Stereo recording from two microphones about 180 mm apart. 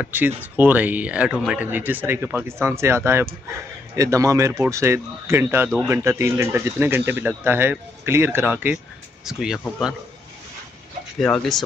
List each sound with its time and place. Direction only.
0.0 s speech: 10° right (ahead or behind)
11.1 s speech: 5° left (ahead or behind)